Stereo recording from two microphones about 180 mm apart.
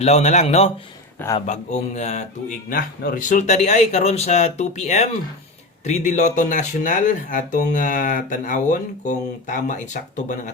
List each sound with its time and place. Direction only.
0.0 s speech: 40° left (ahead or behind)
2.6 s speech: 55° left (ahead or behind)
6.1 s speech: 45° left (ahead or behind)